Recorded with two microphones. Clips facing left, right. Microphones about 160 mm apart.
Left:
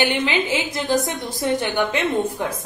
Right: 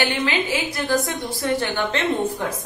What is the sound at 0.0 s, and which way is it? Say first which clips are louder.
A woman's voice: left 2 dB; 20° left (ahead or behind).